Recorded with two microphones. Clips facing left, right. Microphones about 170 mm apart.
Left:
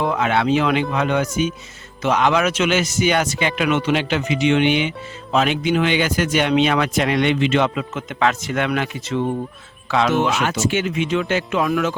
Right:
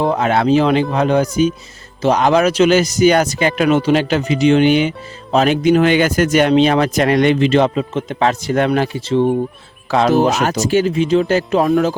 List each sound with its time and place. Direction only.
0.0 s a man's voice: 35° right (ahead or behind)